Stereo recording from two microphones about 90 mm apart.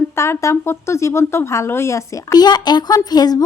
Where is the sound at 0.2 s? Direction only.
30° left (ahead or behind).